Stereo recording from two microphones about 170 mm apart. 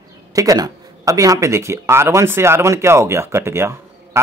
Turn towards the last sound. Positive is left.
turn(degrees=-15)  # may be behind; listen again after turning